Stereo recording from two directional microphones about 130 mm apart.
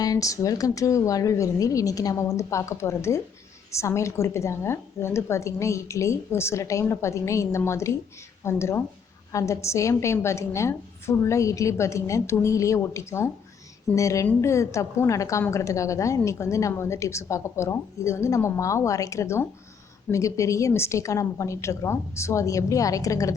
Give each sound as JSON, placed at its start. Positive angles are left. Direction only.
{"t": 0.0, "sound": "a woman's voice", "side_deg": 25}